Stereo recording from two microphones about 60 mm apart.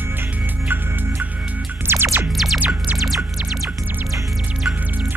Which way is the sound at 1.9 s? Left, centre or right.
Right.